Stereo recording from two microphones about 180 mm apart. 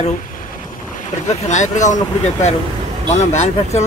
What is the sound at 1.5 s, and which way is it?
Speech, 40° left (ahead or behind).